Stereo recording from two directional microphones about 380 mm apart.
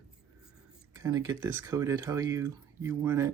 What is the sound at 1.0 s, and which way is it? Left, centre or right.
Speech, centre.